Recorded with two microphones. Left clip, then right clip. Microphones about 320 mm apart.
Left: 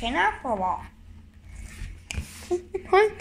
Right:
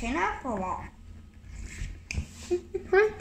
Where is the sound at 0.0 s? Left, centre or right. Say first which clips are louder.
Left 5 dB; left.